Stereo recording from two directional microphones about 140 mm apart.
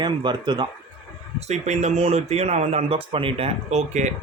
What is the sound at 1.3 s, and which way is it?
Speech, 55° right (ahead or behind).